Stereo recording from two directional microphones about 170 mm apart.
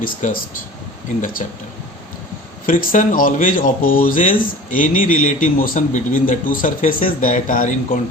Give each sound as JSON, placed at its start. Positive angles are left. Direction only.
{"t": 0.0, "sound": "speech", "side_deg": 55}
{"t": 2.6, "sound": "speech", "side_deg": 50}